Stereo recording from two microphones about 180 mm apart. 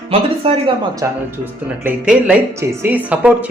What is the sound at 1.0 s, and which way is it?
A woman's voice, 15° right (ahead or behind).